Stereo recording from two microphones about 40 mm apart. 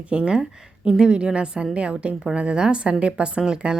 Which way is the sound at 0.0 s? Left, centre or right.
Right.